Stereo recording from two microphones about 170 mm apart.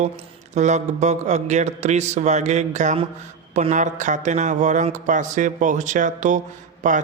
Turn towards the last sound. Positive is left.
turn(degrees=-50)  # may be behind; listen again after turning